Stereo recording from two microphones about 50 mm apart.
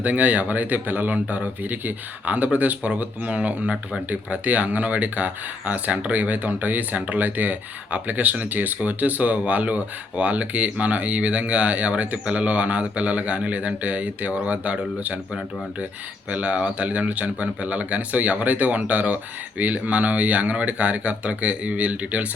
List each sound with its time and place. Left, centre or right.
0.0 s speech: right
16.3 s speech: right